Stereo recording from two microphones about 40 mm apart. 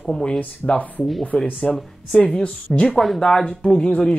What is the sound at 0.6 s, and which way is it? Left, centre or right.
Speech, left.